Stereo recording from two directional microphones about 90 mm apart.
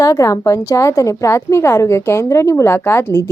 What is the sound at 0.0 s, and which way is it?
A woman's voice, 40° left (ahead or behind).